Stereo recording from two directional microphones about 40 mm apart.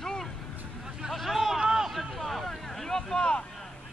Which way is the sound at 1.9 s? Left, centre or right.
Centre.